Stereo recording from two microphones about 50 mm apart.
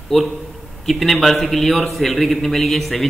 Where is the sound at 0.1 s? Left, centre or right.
Centre.